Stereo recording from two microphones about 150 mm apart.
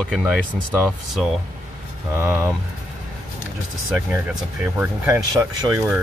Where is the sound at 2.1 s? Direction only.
15° right (ahead or behind).